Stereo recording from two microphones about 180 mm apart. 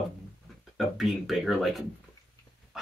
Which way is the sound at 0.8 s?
Centre (ahead or behind).